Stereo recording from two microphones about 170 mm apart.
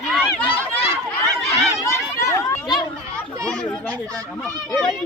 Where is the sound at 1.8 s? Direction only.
15° left (ahead or behind).